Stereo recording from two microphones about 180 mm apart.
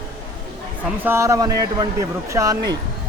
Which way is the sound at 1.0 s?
15° right (ahead or behind).